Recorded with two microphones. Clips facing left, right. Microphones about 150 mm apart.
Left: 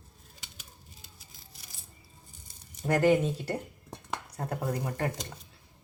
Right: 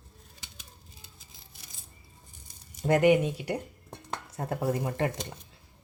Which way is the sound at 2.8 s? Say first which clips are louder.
Right 2 dB; 20° right (ahead or behind).